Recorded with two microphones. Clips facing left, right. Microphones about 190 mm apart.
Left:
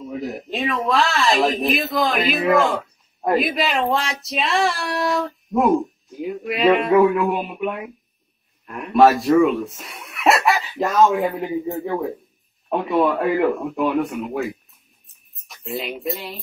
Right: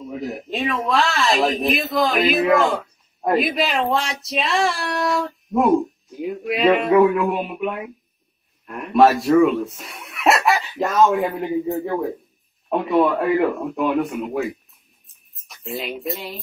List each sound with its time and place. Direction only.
0.2 s child singing: centre (ahead or behind)
9.4 s speech: centre (ahead or behind)
12.6 s child singing: centre (ahead or behind)
15.0 s a sound: centre (ahead or behind)